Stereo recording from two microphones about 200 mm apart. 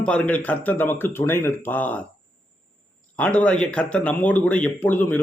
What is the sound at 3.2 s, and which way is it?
Speech, 10° left (ahead or behind).